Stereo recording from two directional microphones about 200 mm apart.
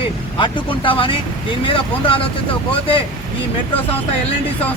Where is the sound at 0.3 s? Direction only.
25° left (ahead or behind).